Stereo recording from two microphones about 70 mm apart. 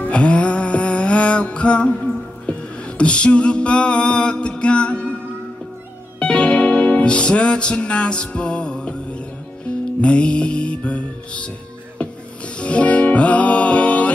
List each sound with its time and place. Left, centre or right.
0.0 s music: centre
3.0 s music: centre
6.1 s music: centre
10.0 s music: centre
12.5 s music: centre